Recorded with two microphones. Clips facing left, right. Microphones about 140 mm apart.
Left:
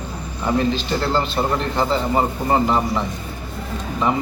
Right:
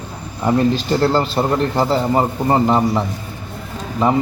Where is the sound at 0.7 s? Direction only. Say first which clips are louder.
Right 5 dB; 40° right (ahead or behind).